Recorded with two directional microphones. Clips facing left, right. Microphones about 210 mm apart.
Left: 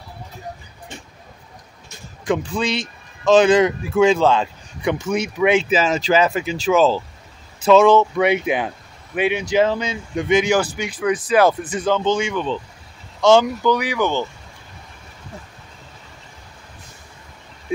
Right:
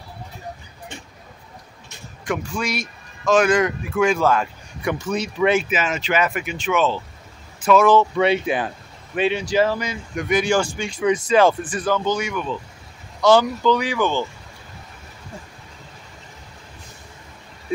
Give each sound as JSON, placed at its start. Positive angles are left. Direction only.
{"t": 2.2, "sound": "speech", "side_deg": 25}
{"t": 5.0, "sound": "speech", "side_deg": 10}
{"t": 5.6, "sound": "speech", "side_deg": 30}
{"t": 7.6, "sound": "speech", "side_deg": 25}
{"t": 10.9, "sound": "speech", "side_deg": 0}
{"t": 11.6, "sound": "speech", "side_deg": 20}